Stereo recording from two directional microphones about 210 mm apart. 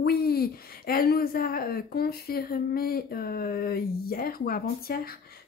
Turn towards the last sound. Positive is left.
turn(degrees=45)  # may be behind; listen again after turning